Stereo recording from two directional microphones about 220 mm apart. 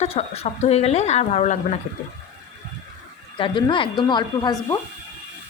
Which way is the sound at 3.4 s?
20° left (ahead or behind).